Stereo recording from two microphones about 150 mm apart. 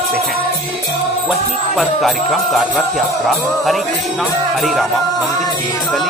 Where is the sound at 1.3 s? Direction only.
Centre (ahead or behind).